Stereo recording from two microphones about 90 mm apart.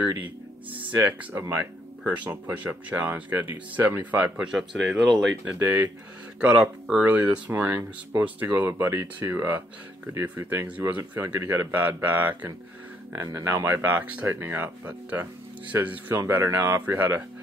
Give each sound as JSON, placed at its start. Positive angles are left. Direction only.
{"t": 0.0, "sound": "speech", "side_deg": -20}
{"t": 1.3, "sound": "speech", "side_deg": -30}
{"t": 2.0, "sound": "speech", "side_deg": -15}
{"t": 4.5, "sound": "speech", "side_deg": -5}
{"t": 5.5, "sound": "speech", "side_deg": -20}
{"t": 6.4, "sound": "speech", "side_deg": -5}
{"t": 7.0, "sound": "speech", "side_deg": -20}
{"t": 13.1, "sound": "speech", "side_deg": -35}